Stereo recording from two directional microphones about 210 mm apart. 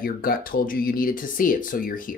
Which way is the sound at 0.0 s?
45° left (ahead or behind).